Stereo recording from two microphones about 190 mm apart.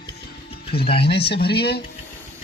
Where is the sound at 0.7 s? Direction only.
55° left (ahead or behind).